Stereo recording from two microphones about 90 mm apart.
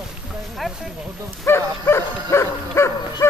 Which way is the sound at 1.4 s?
25° left (ahead or behind).